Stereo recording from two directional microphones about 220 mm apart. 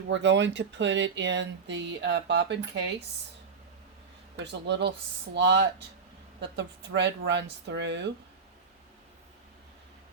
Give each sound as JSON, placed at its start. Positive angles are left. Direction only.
{"t": 0.1, "sound": "speech", "side_deg": -55}
{"t": 4.4, "sound": "speech", "side_deg": -50}